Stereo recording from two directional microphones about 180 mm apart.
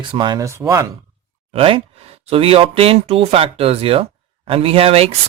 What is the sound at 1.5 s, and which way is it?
Speech, 30° right (ahead or behind).